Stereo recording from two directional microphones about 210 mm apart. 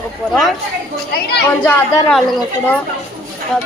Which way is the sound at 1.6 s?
5° left (ahead or behind).